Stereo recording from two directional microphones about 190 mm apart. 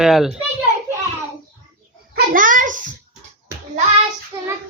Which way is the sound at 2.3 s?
45° right (ahead or behind).